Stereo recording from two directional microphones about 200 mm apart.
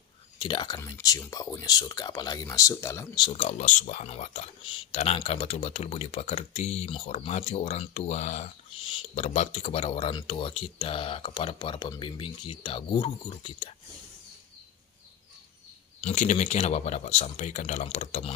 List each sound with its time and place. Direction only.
0.4 s speech: 25° left (ahead or behind)
3.3 s speech: 35° left (ahead or behind)
16.0 s speech: 35° left (ahead or behind)